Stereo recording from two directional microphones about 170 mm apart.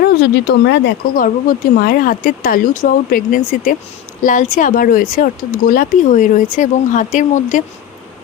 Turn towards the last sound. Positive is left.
turn(degrees=45)  # may be behind; listen again after turning